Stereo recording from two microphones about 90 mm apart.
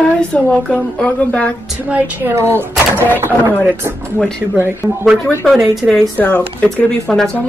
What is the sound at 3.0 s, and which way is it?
Speech, 20° left (ahead or behind).